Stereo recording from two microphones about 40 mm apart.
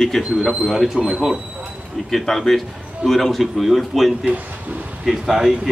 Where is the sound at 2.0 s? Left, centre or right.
Centre.